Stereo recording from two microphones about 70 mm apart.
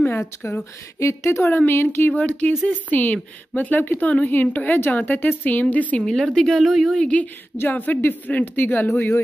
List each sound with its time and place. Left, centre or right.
0.0 s speech: left
0.9 s speech: left
2.1 s a woman's voice: left
6.0 s speech: centre
7.0 s a woman's voice: centre
8.8 s speech: left